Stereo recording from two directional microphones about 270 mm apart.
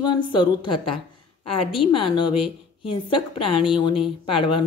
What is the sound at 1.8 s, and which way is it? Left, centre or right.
A woman's voice, centre.